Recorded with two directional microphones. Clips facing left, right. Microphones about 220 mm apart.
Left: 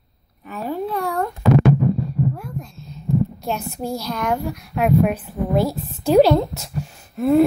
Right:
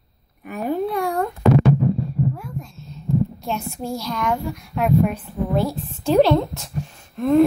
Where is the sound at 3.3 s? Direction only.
Centre (ahead or behind).